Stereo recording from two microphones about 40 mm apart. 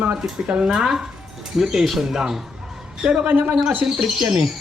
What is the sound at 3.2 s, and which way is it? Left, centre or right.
Speech, right.